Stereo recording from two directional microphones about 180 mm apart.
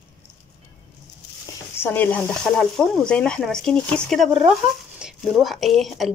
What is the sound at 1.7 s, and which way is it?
Speech, 10° left (ahead or behind).